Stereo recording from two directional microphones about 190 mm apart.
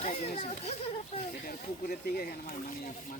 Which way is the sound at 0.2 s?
35° left (ahead or behind).